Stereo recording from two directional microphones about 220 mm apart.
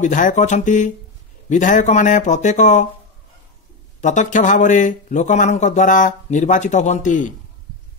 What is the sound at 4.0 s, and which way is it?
Speech, 35° left (ahead or behind).